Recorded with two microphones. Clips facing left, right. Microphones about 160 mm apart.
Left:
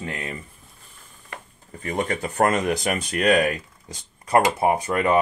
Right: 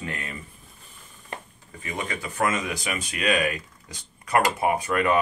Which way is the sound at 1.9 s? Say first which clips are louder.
Left 6 dB; 50° left (ahead or behind).